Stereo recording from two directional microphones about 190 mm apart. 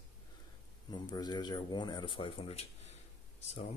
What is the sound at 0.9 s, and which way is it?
Speech, 20° left (ahead or behind).